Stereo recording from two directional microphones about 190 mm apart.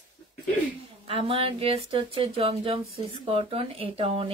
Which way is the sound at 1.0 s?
30° right (ahead or behind).